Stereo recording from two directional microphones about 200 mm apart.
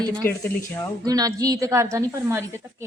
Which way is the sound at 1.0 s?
20° right (ahead or behind).